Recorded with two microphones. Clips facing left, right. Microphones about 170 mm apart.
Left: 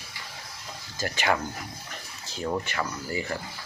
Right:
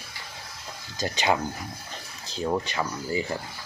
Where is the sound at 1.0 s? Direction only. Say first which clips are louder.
Right 2 dB; 20° right (ahead or behind).